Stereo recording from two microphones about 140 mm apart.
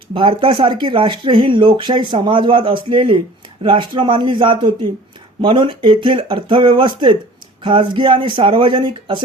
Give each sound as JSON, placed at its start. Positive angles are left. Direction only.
{"t": 0.1, "sound": "speech", "side_deg": -40}